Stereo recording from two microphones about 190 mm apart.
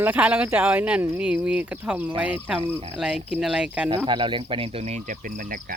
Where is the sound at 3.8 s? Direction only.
25° right (ahead or behind); by 5.7 s 45° right (ahead or behind).